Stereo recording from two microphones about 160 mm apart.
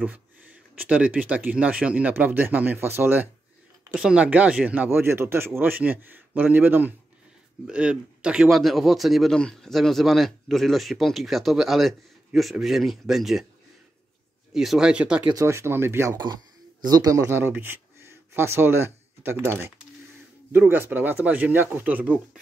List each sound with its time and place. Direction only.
0.7 s speech: 10° right (ahead or behind)
14.5 s speech: centre (ahead or behind)
15.2 s speech: 20° right (ahead or behind)